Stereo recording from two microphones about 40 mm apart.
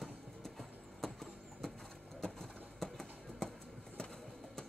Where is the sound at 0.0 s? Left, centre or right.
Centre.